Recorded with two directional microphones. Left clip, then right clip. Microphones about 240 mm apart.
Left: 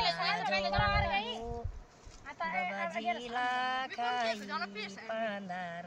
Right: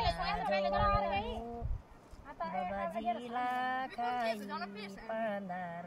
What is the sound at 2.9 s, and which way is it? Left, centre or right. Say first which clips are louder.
Music: left 1 dB; right.